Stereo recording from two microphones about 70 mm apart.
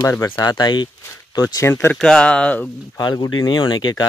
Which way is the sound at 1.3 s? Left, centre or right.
Left.